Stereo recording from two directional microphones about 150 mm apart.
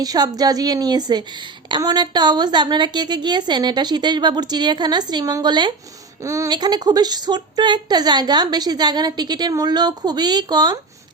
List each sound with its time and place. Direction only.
0.0 s a woman's voice: 25° right (ahead or behind)